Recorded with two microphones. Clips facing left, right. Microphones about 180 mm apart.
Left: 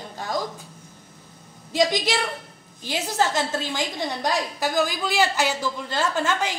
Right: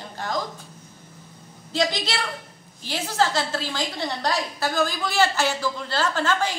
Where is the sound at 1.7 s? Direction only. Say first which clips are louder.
Left 3 dB; 15° left (ahead or behind).